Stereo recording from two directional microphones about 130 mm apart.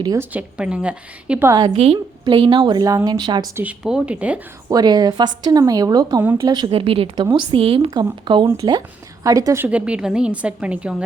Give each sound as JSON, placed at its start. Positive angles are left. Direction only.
{"t": 0.2, "sound": "a woman's voice", "side_deg": -10}
{"t": 1.5, "sound": "a woman's voice", "side_deg": -30}
{"t": 1.7, "sound": "a woman's voice", "side_deg": -50}
{"t": 3.5, "sound": "a woman's voice", "side_deg": -10}
{"t": 4.7, "sound": "a woman's voice", "side_deg": -30}
{"t": 6.6, "sound": "a woman's voice", "side_deg": -45}
{"t": 9.6, "sound": "a woman's voice", "side_deg": -10}